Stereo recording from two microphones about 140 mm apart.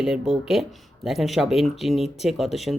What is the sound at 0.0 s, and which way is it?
Speech, 5° right (ahead or behind).